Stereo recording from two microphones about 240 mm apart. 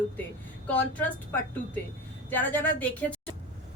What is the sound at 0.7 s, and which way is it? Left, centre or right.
A woman's voice, centre.